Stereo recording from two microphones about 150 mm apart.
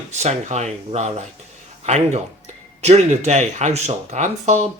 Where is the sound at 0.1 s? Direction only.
45° right (ahead or behind).